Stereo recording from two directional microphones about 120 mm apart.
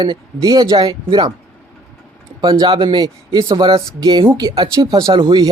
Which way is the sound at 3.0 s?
30° right (ahead or behind).